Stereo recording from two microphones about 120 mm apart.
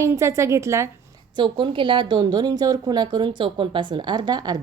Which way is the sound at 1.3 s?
40° right (ahead or behind).